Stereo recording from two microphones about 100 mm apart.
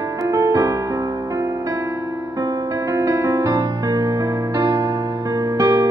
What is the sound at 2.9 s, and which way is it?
Music, 30° right (ahead or behind).